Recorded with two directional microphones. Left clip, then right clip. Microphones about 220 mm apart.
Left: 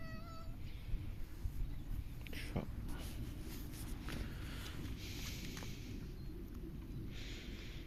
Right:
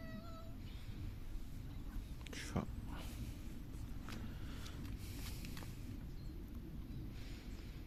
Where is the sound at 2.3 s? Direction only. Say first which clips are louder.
Right 1 dB; 20° right (ahead or behind).